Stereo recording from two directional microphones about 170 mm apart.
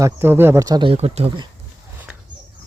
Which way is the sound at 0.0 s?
15° right (ahead or behind).